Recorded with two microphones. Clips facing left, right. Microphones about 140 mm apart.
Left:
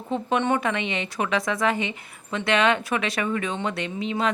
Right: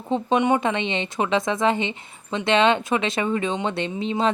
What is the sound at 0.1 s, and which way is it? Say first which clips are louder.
Speech: right 3 dB; 20° right (ahead or behind).